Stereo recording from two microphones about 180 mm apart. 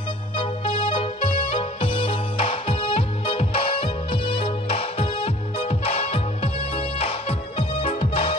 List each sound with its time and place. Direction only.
0.4 s music: 30° left (ahead or behind)